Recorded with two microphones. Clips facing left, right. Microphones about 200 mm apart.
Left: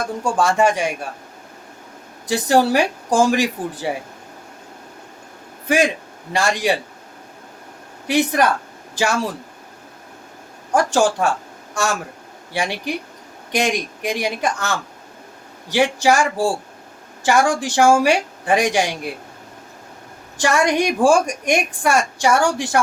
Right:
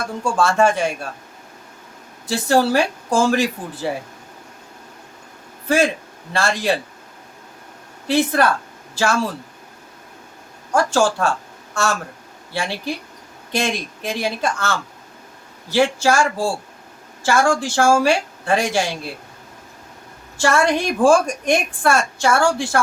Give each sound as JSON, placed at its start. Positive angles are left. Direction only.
{"t": 0.3, "sound": "a woman's voice", "side_deg": 15}
{"t": 2.2, "sound": "a woman's voice", "side_deg": 20}
{"t": 5.6, "sound": "a woman's voice", "side_deg": 15}
{"t": 8.0, "sound": "a woman's voice", "side_deg": 15}
{"t": 10.8, "sound": "a woman's voice", "side_deg": 20}
{"t": 20.4, "sound": "a woman's voice", "side_deg": 15}